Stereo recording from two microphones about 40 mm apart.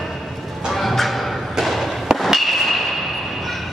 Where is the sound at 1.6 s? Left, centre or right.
Centre.